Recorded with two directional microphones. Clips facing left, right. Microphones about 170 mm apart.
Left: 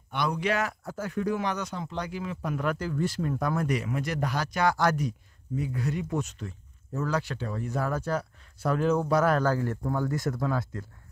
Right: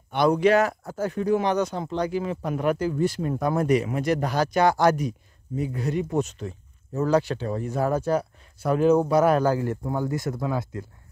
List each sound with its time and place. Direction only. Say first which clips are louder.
0.3 s speech: right 10 dB; 35° right (ahead or behind); by 10.9 s 15° right (ahead or behind)